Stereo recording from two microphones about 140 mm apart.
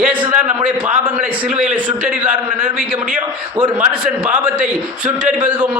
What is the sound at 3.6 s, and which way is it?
Speech, 35° right (ahead or behind).